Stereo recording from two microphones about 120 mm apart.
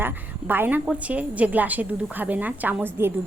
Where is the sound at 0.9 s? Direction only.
10° right (ahead or behind).